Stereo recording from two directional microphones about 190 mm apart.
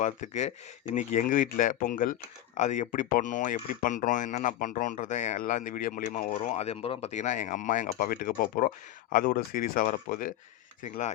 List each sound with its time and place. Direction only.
0.0 s speech: 40° left (ahead or behind)